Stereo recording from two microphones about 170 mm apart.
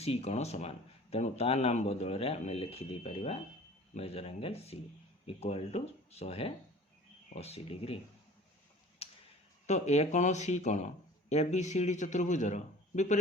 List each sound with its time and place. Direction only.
0.0 s speech: 35° left (ahead or behind)
9.0 s a sound: 35° left (ahead or behind)
9.6 s speech: 40° left (ahead or behind)